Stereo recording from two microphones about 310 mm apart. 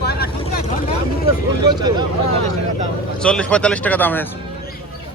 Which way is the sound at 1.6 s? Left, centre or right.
Centre.